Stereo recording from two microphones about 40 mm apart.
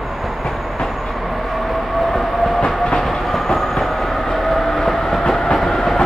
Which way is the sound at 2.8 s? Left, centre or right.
Centre.